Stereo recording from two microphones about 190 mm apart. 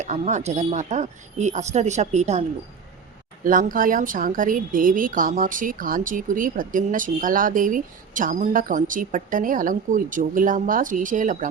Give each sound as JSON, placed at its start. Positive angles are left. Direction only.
{"t": 0.0, "sound": "speech", "side_deg": -40}
{"t": 3.4, "sound": "speech", "side_deg": -45}